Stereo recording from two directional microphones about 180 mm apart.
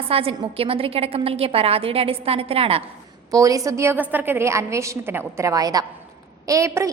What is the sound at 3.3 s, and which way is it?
A woman's voice, 20° right (ahead or behind).